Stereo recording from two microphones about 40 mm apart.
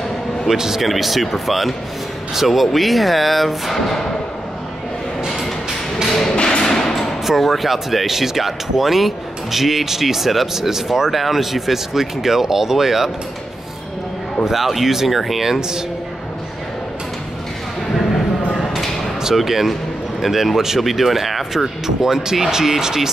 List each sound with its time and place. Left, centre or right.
0.5 s speech: centre
6.3 s thump: left
7.2 s speech: centre
14.4 s speech: centre
18.6 s a sound: centre
19.3 s a man's voice: centre